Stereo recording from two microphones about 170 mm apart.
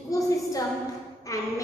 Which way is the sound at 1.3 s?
20° left (ahead or behind).